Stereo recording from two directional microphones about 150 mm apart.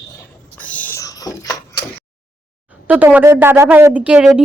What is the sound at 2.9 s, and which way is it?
A woman's voice, 10° right (ahead or behind).